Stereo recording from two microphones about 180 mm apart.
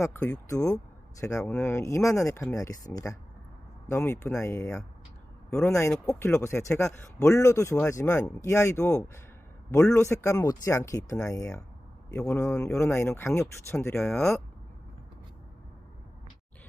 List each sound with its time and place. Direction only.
0.0 s speech: 10° left (ahead or behind)
13.9 s speech: 5° left (ahead or behind)